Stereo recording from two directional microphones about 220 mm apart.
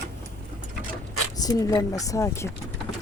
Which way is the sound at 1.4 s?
15° left (ahead or behind).